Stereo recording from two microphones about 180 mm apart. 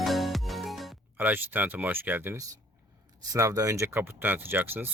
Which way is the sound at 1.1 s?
10° right (ahead or behind).